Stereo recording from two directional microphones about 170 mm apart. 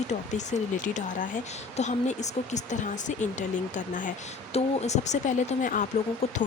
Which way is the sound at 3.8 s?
50° left (ahead or behind).